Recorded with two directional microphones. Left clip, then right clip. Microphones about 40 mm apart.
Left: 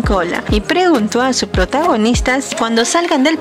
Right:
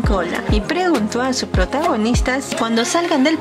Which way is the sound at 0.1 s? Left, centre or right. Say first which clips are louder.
Left 5 dB; left.